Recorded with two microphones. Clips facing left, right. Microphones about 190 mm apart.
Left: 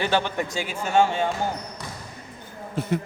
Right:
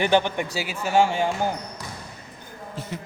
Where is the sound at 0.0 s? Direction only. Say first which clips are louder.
Right 3 dB; 15° right (ahead or behind).